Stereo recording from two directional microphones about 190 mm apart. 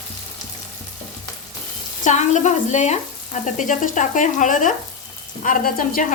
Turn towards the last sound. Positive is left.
turn(degrees=45)  # may be behind; listen again after turning